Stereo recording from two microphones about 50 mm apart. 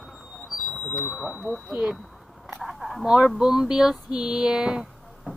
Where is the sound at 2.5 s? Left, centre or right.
Centre.